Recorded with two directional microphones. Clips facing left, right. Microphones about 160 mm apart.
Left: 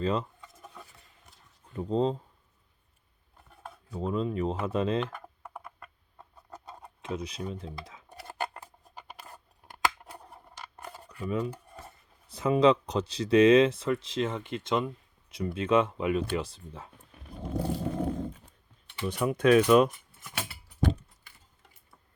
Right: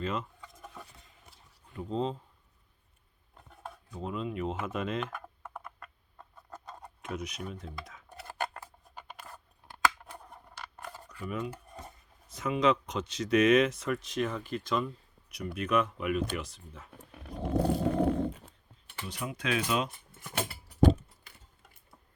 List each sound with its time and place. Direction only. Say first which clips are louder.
0.0 s speech: left 5 dB; 35° left (ahead or behind)
1.7 s speech: left 5 dB; 40° left (ahead or behind)
3.9 s speech: left 6 dB; 40° left (ahead or behind)
5.4 s a sound: even; 10° left (ahead or behind)
7.0 s speech: left 3 dB; 30° left (ahead or behind)
10.9 s cutlery: left 3 dB; 15° left (ahead or behind)
11.3 s speech: left 5 dB; 30° left (ahead or behind)
17.2 s a sound: right 4 dB; 90° right
19.0 s speech: left 11 dB; 55° left (ahead or behind)